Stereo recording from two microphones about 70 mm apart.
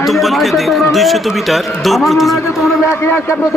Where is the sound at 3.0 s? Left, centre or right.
Left.